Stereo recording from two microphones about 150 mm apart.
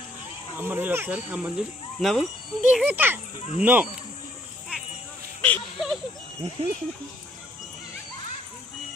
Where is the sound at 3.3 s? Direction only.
50° left (ahead or behind).